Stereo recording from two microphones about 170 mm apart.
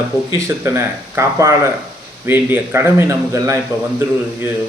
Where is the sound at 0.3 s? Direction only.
15° right (ahead or behind).